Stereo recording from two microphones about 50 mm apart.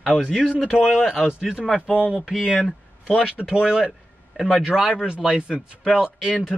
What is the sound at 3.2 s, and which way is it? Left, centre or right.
Speech, right.